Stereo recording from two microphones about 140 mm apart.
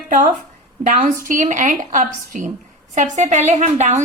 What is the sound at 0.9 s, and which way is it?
A woman's voice, 65° right (ahead or behind).